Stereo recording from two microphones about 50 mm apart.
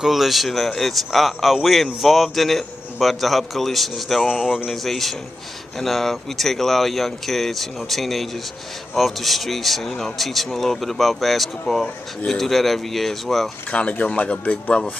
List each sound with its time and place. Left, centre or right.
0.0 s speech: centre
4.3 s speech: centre
4.6 s speech: centre
13.7 s speech: left